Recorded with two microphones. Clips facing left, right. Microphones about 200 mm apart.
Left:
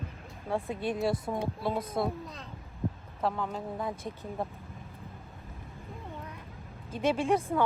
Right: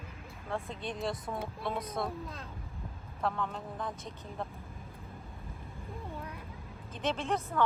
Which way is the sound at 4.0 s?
50° left (ahead or behind).